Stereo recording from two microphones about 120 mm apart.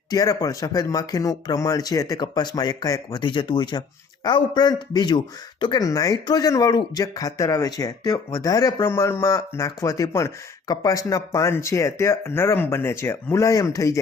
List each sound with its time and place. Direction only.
0.1 s speech: 30° left (ahead or behind)
5.8 s speech: 30° left (ahead or behind)